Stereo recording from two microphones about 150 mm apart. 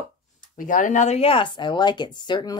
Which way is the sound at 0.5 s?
60° left (ahead or behind).